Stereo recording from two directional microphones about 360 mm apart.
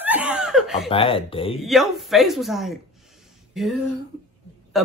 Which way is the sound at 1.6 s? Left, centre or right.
Centre.